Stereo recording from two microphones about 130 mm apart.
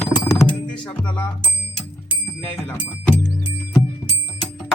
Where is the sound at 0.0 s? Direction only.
20° left (ahead or behind).